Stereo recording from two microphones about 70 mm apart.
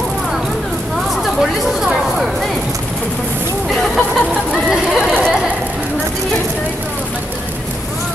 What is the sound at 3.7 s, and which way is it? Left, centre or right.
Speech, centre.